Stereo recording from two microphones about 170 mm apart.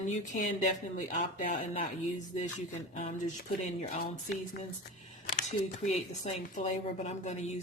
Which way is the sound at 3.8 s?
50° left (ahead or behind).